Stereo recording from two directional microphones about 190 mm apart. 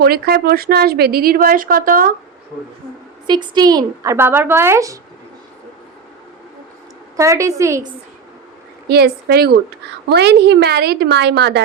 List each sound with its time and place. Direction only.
0.0 s speech: 55° right (ahead or behind)
3.2 s speech: 25° right (ahead or behind)
7.2 s speech: 15° right (ahead or behind)
8.9 s a woman's voice: 55° right (ahead or behind)